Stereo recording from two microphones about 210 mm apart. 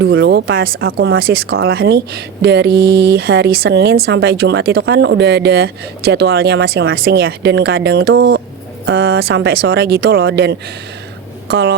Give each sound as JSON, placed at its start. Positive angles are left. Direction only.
{"t": 0.0, "sound": "speech", "side_deg": -50}